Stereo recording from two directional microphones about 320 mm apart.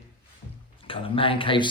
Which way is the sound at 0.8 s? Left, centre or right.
Centre.